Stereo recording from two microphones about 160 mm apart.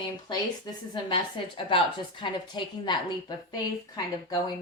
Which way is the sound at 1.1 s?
35° left (ahead or behind).